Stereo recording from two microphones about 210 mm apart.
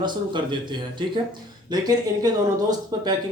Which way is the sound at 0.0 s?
20° right (ahead or behind).